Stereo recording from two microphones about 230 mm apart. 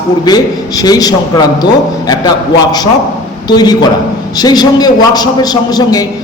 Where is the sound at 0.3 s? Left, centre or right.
Centre.